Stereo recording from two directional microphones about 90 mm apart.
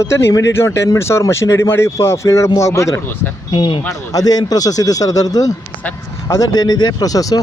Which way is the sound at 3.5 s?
65° left (ahead or behind).